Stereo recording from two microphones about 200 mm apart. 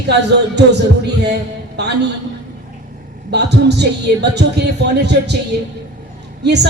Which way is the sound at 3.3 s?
55° right (ahead or behind).